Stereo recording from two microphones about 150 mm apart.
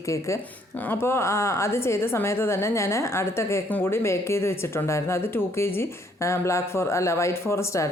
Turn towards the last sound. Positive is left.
turn(degrees=20)  # may be behind; listen again after turning